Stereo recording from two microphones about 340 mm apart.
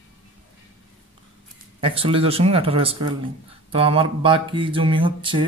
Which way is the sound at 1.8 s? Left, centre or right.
Centre.